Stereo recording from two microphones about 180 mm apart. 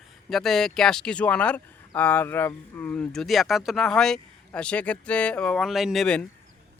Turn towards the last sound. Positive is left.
turn(degrees=0)  # may be behind; listen again after turning